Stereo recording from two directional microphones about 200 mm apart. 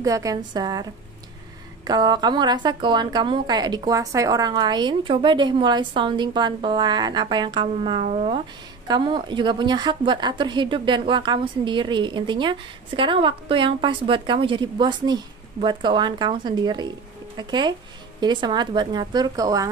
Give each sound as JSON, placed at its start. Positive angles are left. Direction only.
{"t": 0.0, "sound": "a woman's voice", "side_deg": -15}